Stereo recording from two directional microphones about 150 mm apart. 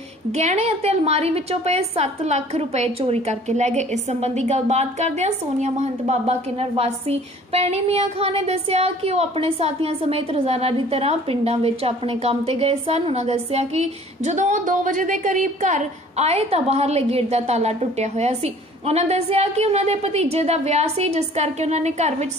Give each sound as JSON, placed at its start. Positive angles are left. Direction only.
{"t": 0.3, "sound": "a woman's voice", "side_deg": -45}